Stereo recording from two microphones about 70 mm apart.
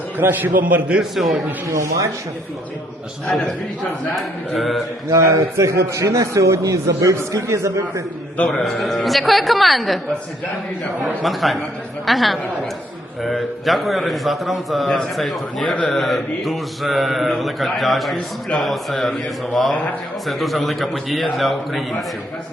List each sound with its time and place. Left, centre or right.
0.2 s a man's voice: right
1.1 s mantra: centre
1.6 s a man's voice: right
4.1 s mantra: centre
5.1 s a man's voice: right
7.2 s a man's voice: right
8.6 s mantra: centre
11.2 s mantra: centre